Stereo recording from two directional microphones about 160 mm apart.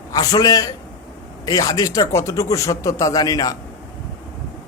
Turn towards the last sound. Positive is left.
turn(degrees=25)  # may be behind; listen again after turning